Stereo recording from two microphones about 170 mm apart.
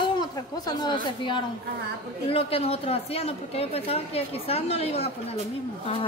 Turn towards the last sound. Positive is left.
turn(degrees=35)  # may be behind; listen again after turning